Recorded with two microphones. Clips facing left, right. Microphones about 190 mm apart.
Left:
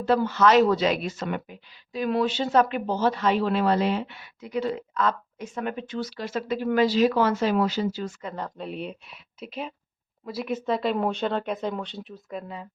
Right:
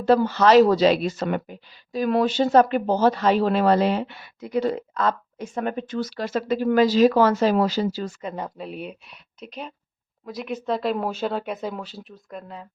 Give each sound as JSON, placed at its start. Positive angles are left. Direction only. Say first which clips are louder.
{"t": 0.0, "sound": "speech", "louder": "right 3 dB", "side_deg": -40}
{"t": 8.2, "sound": "speech", "louder": "right 2 dB", "side_deg": -15}